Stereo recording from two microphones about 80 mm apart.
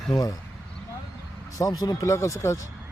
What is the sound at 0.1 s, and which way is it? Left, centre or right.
Speech, left.